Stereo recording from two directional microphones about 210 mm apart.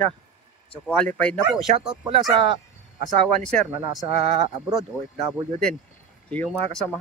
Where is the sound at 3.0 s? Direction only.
5° left (ahead or behind).